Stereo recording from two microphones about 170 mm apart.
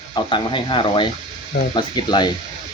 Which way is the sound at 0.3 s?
30° left (ahead or behind).